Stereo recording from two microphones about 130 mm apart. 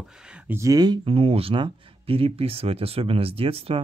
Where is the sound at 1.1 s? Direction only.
50° right (ahead or behind).